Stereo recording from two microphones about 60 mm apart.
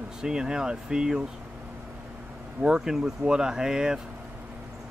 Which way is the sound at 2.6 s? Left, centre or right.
Centre.